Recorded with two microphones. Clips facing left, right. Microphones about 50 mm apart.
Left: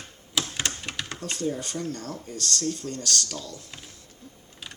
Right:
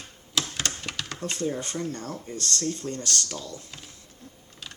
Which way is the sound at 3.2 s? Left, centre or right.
Centre.